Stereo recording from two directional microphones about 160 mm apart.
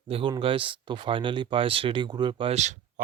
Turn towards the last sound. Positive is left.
turn(degrees=-50)  # may be behind; listen again after turning